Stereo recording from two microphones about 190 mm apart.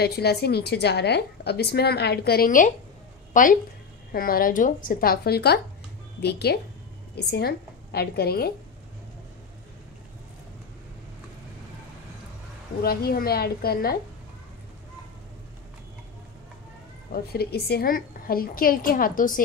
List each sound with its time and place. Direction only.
0.0 s a woman's voice: 55° left (ahead or behind)
12.8 s a woman's voice: 55° left (ahead or behind)
17.1 s a woman's voice: 55° left (ahead or behind)